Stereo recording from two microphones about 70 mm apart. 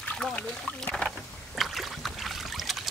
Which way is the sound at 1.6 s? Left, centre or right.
Centre.